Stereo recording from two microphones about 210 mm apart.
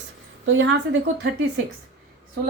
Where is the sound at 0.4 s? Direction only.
65° right (ahead or behind).